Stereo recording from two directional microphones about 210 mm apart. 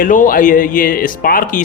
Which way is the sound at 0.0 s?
40° left (ahead or behind).